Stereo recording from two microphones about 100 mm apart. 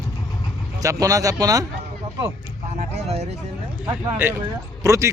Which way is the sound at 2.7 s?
90° right.